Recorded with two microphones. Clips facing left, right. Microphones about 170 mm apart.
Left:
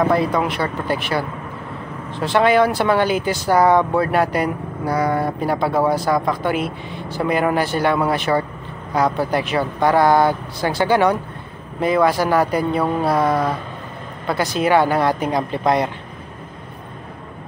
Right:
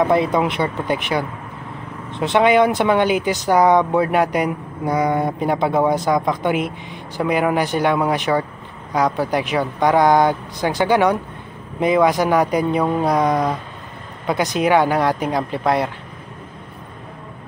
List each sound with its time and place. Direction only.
0.1 s speech: 20° right (ahead or behind)